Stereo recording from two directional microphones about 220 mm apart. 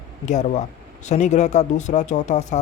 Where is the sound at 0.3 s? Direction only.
30° left (ahead or behind).